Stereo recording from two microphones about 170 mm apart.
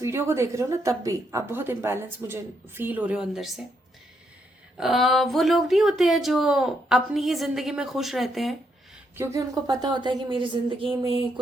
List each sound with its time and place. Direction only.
0.0 s a woman's voice: 15° right (ahead or behind)
4.8 s speech: centre (ahead or behind)
9.1 s a woman's voice: 15° right (ahead or behind)
11.0 s a sound: 35° right (ahead or behind)